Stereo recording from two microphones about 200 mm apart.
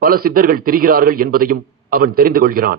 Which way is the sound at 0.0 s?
45° right (ahead or behind).